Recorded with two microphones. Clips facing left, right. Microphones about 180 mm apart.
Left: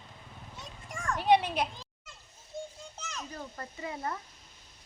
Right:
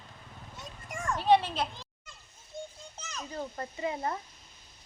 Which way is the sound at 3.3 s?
25° right (ahead or behind).